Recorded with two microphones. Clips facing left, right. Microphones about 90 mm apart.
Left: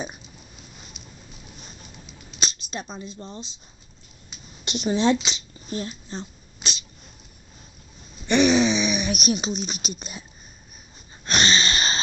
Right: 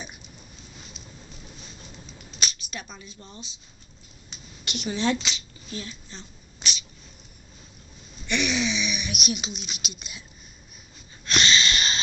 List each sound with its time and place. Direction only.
1.0 s a sound: 5° left (ahead or behind)
2.4 s speech: 30° left (ahead or behind)
4.6 s speech: 30° left (ahead or behind)
5.7 s dog: 40° left (ahead or behind)
8.3 s a sound: 35° left (ahead or behind)
11.2 s wheeze: 40° left (ahead or behind)